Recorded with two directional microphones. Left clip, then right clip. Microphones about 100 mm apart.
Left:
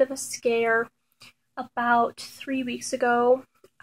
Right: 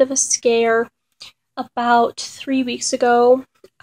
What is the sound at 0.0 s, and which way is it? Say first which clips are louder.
A woman's voice: right 8 dB; 15° right (ahead or behind).